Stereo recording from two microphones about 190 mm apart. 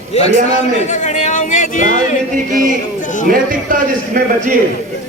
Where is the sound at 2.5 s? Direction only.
45° right (ahead or behind).